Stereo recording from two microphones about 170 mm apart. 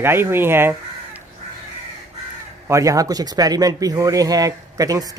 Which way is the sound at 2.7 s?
20° right (ahead or behind).